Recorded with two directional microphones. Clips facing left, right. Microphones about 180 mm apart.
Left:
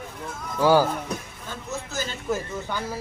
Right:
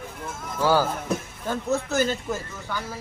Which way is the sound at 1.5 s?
60° right (ahead or behind).